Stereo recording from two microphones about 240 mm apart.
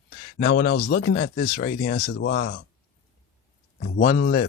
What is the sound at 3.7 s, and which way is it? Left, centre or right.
Speech, left.